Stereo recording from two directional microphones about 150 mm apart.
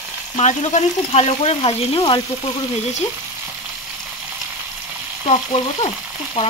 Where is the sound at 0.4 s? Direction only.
50° left (ahead or behind); by 2.5 s 35° left (ahead or behind).